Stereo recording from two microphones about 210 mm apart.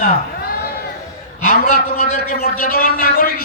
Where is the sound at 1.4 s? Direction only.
40° left (ahead or behind).